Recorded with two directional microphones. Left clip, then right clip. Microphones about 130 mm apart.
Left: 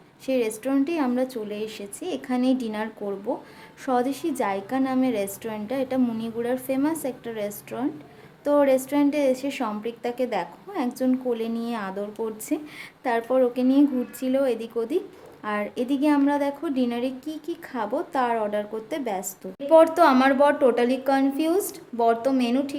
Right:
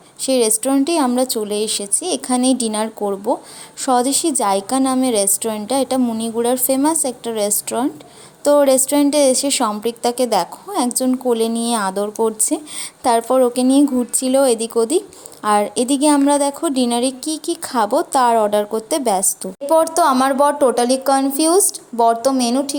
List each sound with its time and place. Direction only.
0.3 s a woman's voice: 40° right (ahead or behind)